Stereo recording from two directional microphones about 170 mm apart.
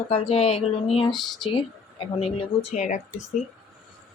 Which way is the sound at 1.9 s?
30° left (ahead or behind).